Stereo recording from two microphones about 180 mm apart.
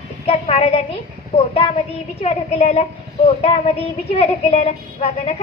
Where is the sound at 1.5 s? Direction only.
35° left (ahead or behind).